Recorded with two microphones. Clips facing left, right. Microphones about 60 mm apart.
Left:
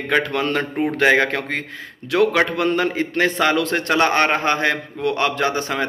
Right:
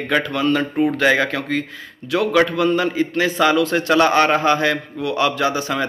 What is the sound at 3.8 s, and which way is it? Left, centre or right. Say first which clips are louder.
A man's voice: right 2 dB; left.